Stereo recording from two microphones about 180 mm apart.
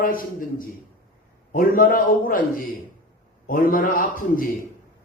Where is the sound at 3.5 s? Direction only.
50° left (ahead or behind).